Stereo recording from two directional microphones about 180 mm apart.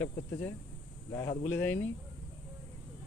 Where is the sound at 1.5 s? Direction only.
10° left (ahead or behind).